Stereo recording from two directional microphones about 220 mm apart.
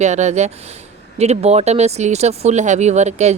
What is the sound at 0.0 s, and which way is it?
Speech, 30° right (ahead or behind).